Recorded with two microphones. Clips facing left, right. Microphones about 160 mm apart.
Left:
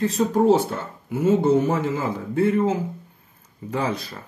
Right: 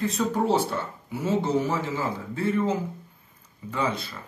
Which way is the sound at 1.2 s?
55° left (ahead or behind).